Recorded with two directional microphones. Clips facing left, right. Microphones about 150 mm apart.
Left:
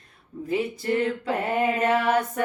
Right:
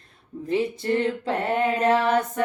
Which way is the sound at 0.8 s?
30° right (ahead or behind).